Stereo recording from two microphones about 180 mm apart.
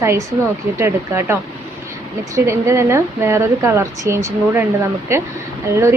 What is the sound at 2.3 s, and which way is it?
A woman's voice, 15° right (ahead or behind).